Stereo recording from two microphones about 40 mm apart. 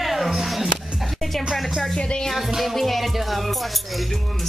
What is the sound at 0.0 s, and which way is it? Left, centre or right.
Music, centre.